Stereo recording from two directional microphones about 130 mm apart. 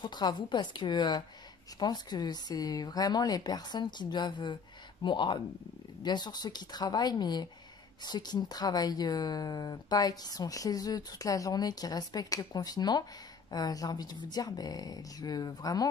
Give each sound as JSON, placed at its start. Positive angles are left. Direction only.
{"t": 0.0, "sound": "speech", "side_deg": 35}